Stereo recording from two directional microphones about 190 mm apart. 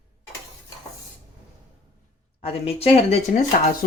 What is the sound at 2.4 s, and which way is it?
Speech, 30° left (ahead or behind).